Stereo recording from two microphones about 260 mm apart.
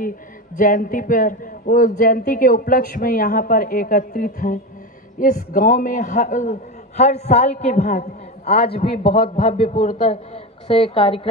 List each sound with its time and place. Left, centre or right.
0.6 s a man's voice: left
8.5 s a man's voice: left
8.7 s a man's voice: left